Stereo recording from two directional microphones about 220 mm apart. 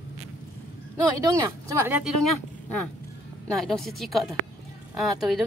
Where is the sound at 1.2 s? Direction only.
15° right (ahead or behind).